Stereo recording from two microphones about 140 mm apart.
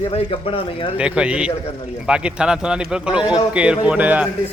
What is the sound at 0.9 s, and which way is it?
A man's voice, 10° right (ahead or behind).